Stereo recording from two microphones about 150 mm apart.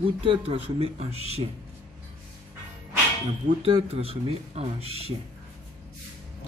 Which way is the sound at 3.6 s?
40° right (ahead or behind).